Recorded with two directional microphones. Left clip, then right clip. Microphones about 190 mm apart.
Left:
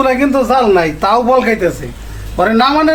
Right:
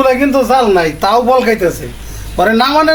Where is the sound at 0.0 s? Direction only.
25° right (ahead or behind).